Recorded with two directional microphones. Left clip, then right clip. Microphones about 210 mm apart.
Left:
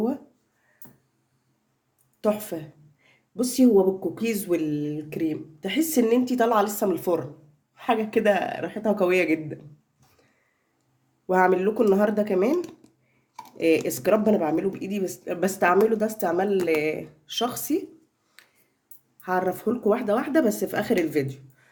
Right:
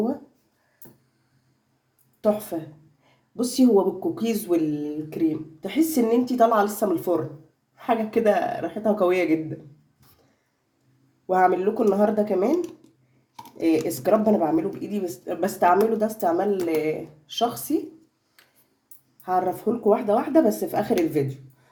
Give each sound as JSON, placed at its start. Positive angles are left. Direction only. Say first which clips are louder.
{"t": 3.3, "sound": "speech", "louder": "even", "side_deg": 15}
{"t": 11.3, "sound": "speech", "louder": "right 1 dB", "side_deg": 25}
{"t": 13.6, "sound": "speech", "louder": "left 1 dB", "side_deg": 25}
{"t": 19.2, "sound": "speech", "louder": "right 2 dB", "side_deg": 25}